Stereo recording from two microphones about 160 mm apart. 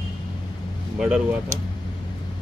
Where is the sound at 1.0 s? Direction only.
5° right (ahead or behind).